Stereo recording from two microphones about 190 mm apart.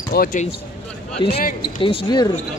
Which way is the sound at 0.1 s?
50° left (ahead or behind).